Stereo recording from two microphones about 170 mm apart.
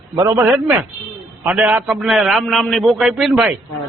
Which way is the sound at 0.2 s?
20° right (ahead or behind).